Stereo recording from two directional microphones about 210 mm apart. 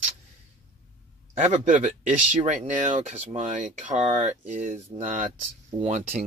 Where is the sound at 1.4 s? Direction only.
35° right (ahead or behind).